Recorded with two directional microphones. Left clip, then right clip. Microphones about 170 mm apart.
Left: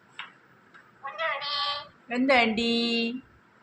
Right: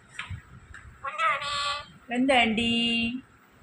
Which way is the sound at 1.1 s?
15° left (ahead or behind).